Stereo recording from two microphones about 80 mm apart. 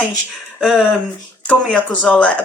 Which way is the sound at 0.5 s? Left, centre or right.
Centre.